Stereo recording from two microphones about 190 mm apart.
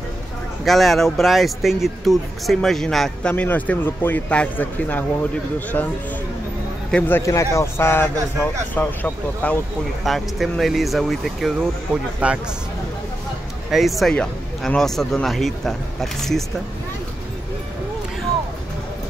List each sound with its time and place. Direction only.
0.7 s speech: centre (ahead or behind)
13.7 s speech: centre (ahead or behind)